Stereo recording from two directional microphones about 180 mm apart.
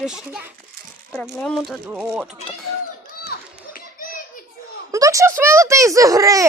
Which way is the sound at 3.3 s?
55° left (ahead or behind).